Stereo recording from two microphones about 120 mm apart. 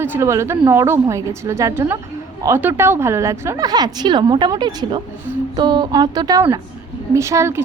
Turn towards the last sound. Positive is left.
turn(degrees=-25)  # may be behind; listen again after turning